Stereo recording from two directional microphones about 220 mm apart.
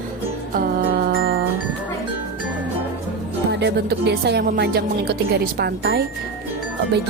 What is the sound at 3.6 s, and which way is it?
Music, 50° right (ahead or behind).